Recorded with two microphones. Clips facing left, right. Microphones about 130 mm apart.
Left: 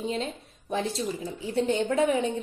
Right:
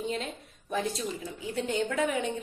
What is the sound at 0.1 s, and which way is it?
A woman's voice, 30° left (ahead or behind).